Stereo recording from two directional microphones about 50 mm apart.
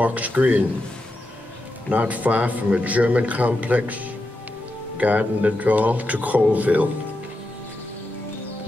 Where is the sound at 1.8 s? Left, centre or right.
Right.